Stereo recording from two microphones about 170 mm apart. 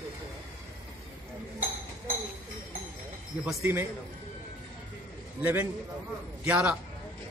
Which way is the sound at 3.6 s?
15° right (ahead or behind).